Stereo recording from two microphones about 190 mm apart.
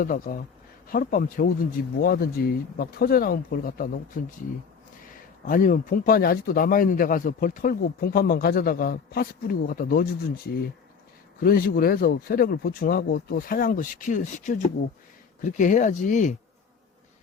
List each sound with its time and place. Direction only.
0.0 s a man's voice: 45° left (ahead or behind)
5.5 s a man's voice: 45° left (ahead or behind)
11.3 s a man's voice: 50° left (ahead or behind)